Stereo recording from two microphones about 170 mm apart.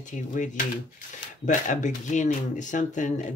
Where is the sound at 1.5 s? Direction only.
45° left (ahead or behind).